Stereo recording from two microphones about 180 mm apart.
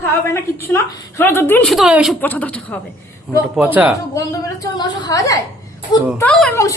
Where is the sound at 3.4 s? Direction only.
5° right (ahead or behind).